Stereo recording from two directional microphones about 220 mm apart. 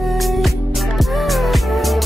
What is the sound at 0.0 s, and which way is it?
Music, centre (ahead or behind).